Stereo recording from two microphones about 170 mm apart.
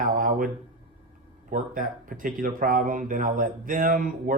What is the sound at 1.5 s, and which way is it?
Speech, 55° right (ahead or behind).